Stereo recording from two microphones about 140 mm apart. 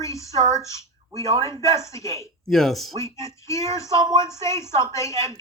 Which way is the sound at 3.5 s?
20° left (ahead or behind).